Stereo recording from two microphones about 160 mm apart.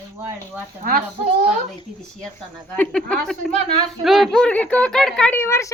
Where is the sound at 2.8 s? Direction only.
5° left (ahead or behind).